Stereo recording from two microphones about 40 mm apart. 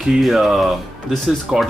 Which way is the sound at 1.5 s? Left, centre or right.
Right.